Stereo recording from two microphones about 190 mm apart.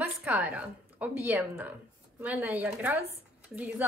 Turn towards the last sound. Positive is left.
turn(degrees=-5)  # may be behind; listen again after turning